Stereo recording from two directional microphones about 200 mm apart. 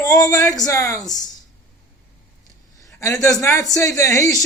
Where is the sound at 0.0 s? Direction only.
15° left (ahead or behind).